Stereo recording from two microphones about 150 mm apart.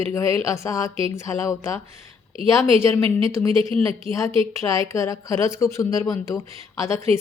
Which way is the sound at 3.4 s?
15° left (ahead or behind).